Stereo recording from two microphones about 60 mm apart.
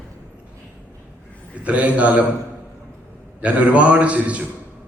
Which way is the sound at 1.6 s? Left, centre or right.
Right.